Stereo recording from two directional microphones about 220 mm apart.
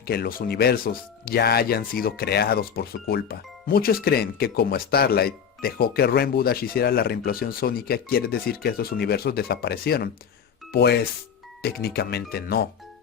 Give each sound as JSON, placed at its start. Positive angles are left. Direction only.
{"t": 0.1, "sound": "speech", "side_deg": 45}